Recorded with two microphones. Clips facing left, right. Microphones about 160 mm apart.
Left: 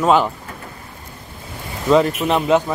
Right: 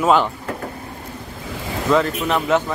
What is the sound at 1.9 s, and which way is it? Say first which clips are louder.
Speech: left 4 dB; 20° left (ahead or behind).